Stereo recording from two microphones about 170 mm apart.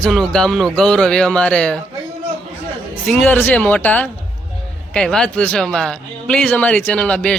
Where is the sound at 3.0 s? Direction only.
10° left (ahead or behind).